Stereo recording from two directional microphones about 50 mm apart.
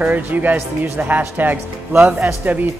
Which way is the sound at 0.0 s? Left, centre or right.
Right.